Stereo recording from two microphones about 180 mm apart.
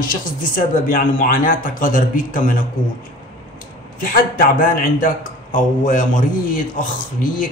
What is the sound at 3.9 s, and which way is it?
A man's voice, 50° left (ahead or behind).